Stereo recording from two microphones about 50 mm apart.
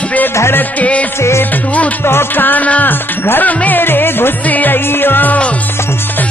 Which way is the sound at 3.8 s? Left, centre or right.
Left.